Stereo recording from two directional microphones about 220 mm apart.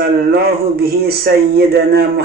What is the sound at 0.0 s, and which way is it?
A man's voice, 45° right (ahead or behind).